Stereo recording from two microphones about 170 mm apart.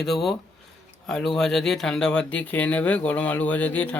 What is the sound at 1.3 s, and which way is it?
Speech, 5° left (ahead or behind).